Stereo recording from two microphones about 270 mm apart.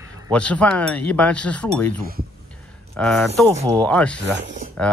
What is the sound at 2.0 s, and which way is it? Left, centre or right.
Speech, right.